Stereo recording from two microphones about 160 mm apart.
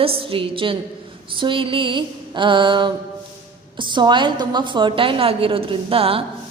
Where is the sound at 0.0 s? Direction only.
35° right (ahead or behind).